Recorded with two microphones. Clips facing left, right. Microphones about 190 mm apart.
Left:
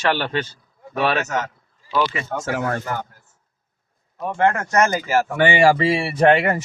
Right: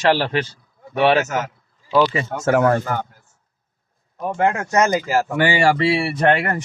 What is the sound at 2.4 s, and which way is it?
Speech, 55° right (ahead or behind).